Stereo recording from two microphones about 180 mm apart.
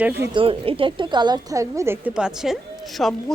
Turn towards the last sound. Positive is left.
turn(degrees=5)  # may be behind; listen again after turning